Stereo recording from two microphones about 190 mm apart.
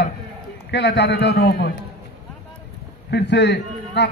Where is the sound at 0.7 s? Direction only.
65° left (ahead or behind).